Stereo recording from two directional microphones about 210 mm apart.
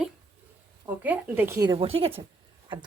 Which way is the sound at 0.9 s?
10° right (ahead or behind).